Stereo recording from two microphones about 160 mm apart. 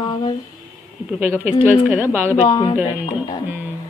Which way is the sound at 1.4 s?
15° right (ahead or behind).